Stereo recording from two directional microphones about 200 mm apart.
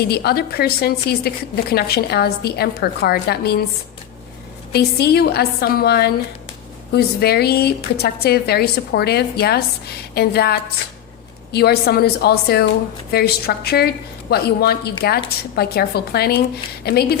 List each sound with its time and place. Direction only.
0.0 s a woman's voice: 50° left (ahead or behind)
4.7 s a woman's voice: 50° left (ahead or behind)